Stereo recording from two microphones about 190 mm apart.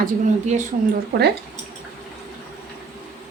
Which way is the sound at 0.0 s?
40° right (ahead or behind).